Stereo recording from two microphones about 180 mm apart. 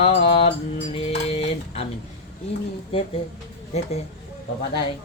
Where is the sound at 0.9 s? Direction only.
35° left (ahead or behind).